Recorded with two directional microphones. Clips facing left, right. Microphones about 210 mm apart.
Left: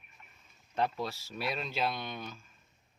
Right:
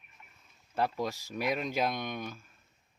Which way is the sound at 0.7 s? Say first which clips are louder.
Right 1 dB; 10° right (ahead or behind).